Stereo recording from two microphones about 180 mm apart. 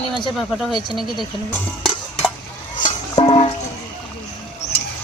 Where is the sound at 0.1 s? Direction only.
25° left (ahead or behind).